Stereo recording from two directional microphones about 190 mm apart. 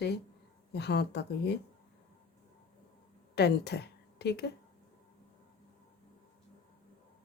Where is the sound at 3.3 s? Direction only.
60° left (ahead or behind).